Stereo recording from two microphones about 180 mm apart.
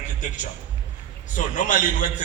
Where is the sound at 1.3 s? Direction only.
45° left (ahead or behind).